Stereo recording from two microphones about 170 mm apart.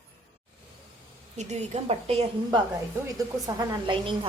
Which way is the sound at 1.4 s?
40° right (ahead or behind).